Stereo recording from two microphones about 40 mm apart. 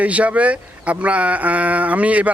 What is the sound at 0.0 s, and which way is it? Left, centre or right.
Speech, right.